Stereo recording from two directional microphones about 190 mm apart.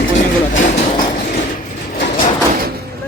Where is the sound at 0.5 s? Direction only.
40° left (ahead or behind).